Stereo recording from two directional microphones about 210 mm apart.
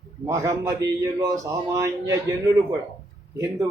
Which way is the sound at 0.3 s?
15° right (ahead or behind).